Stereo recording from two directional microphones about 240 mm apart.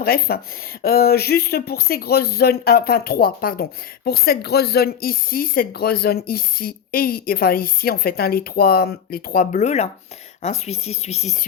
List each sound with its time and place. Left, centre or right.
0.0 s speech: left